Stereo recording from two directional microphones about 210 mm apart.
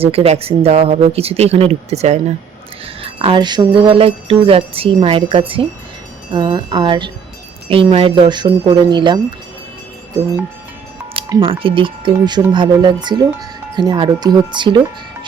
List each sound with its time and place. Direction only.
0.0 s music: 30° right (ahead or behind)
11.1 s music: 25° right (ahead or behind)